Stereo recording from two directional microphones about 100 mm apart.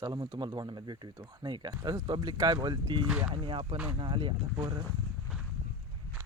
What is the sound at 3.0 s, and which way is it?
Speech, 10° right (ahead or behind).